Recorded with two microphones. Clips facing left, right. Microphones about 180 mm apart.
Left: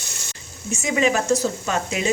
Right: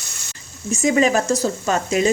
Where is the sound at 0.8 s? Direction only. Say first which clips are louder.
Right 4 dB; 40° right (ahead or behind).